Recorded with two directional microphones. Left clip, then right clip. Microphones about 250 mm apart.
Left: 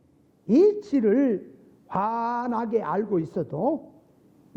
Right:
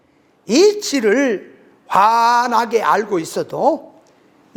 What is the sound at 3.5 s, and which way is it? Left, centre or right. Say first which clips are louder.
Speech: right 11 dB; right.